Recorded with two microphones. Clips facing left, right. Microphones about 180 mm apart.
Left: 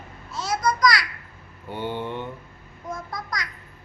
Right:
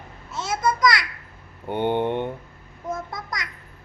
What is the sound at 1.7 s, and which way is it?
Speech, 60° right (ahead or behind).